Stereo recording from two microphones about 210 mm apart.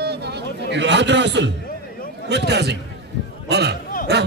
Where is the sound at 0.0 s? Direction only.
50° right (ahead or behind).